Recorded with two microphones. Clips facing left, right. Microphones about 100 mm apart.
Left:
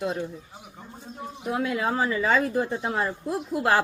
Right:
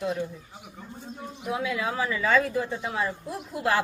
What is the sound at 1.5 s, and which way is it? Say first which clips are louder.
A woman's voice: left 3 dB; 50° left (ahead or behind).